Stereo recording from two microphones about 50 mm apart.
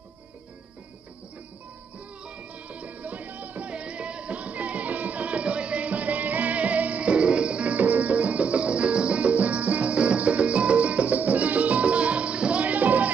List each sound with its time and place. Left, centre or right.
2.2 s music: right